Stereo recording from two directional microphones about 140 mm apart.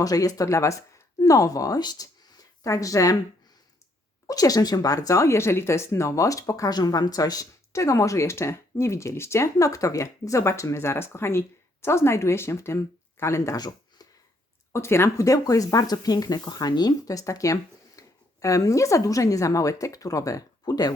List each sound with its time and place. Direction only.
0.0 s speech: 25° left (ahead or behind)
4.3 s speech: 25° left (ahead or behind)